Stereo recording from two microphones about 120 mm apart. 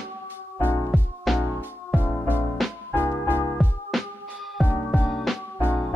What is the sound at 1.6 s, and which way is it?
Music, 15° left (ahead or behind).